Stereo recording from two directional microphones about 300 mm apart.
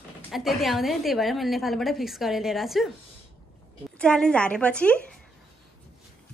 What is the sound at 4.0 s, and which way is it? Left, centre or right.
Speech, centre.